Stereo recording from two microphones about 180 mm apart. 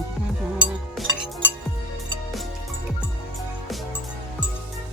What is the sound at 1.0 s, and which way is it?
Chink, centre (ahead or behind).